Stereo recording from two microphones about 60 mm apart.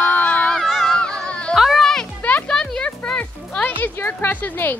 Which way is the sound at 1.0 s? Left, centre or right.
Centre.